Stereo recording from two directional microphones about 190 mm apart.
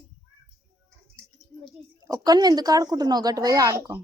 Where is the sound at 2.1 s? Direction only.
20° right (ahead or behind).